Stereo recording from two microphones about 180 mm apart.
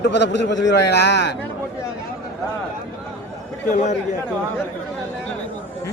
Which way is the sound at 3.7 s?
40° left (ahead or behind).